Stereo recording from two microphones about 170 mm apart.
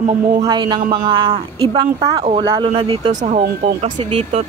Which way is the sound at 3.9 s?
40° right (ahead or behind).